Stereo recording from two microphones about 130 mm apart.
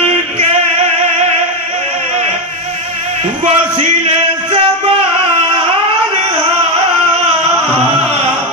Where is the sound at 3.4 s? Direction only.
50° right (ahead or behind).